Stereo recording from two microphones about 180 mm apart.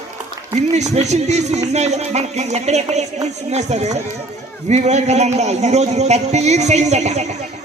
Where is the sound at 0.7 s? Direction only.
40° right (ahead or behind).